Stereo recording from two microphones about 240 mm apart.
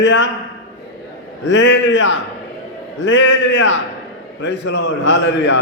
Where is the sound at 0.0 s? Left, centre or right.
Left.